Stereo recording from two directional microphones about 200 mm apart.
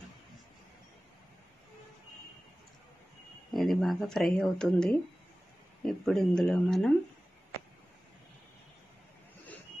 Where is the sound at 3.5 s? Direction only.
Centre (ahead or behind).